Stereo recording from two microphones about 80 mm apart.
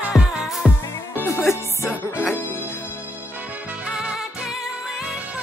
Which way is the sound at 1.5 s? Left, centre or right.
Left.